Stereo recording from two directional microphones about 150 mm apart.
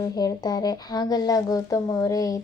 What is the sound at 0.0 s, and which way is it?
Speech, 25° left (ahead or behind).